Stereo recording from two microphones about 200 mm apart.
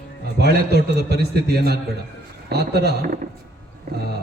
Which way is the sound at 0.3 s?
55° right (ahead or behind).